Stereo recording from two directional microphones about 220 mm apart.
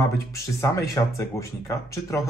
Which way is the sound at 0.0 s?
15° left (ahead or behind).